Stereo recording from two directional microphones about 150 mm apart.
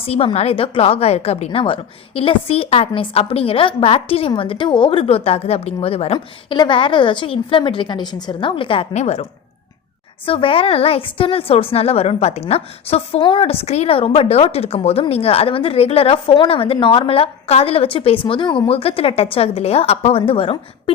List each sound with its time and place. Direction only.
0.0 s speech: 40° left (ahead or behind)
6.1 s speech: 30° left (ahead or behind)
10.2 s speech: 35° left (ahead or behind)